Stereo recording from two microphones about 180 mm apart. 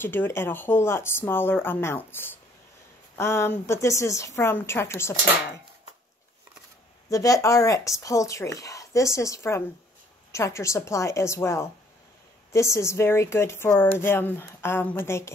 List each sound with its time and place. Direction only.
0.0 s speech: 10° left (ahead or behind)
7.1 s speech: 20° left (ahead or behind)